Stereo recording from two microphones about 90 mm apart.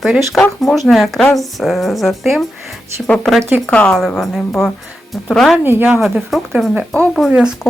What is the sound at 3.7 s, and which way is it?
Speech, 10° left (ahead or behind).